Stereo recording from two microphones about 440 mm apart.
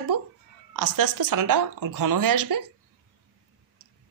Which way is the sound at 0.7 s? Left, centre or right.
Right.